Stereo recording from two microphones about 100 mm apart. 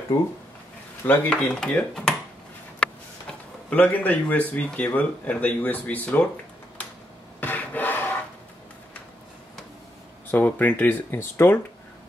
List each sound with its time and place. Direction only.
0.1 s speech: 35° left (ahead or behind)
1.3 s speech: 10° left (ahead or behind)
6.8 s a sound: 15° left (ahead or behind)
7.3 s filing: 20° left (ahead or behind)
10.3 s speech: 15° left (ahead or behind)